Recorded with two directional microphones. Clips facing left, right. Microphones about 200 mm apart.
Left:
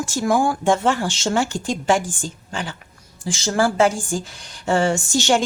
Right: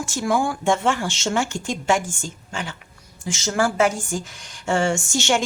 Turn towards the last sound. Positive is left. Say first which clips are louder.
# left 3 dB
turn(degrees=35)  # may be behind; listen again after turning